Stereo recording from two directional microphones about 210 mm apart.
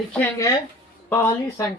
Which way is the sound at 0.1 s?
15° left (ahead or behind).